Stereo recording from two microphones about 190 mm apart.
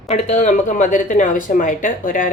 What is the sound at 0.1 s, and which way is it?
Speech, 35° left (ahead or behind).